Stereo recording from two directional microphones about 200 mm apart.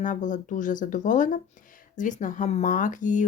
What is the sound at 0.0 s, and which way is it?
Speech, 40° left (ahead or behind).